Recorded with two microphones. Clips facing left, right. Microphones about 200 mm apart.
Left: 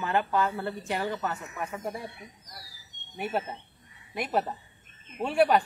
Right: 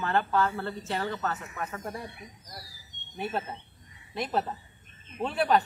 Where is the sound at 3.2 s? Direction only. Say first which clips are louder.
Left 2 dB; 10° left (ahead or behind).